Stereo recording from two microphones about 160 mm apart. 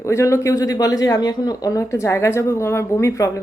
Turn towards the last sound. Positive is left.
turn(degrees=15)  # may be behind; listen again after turning